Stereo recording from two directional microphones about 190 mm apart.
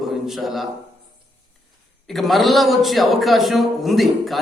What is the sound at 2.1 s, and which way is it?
A man's voice, centre (ahead or behind).